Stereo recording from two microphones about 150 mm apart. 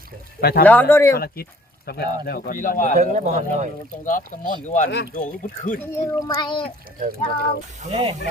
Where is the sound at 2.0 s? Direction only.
90° left; by 2.9 s 60° left (ahead or behind).